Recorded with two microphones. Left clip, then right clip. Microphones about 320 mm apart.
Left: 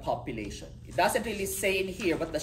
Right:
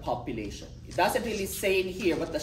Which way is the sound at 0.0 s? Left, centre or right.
Centre.